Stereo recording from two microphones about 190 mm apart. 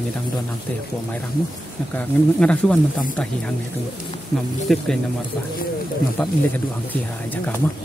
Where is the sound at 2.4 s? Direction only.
5° left (ahead or behind).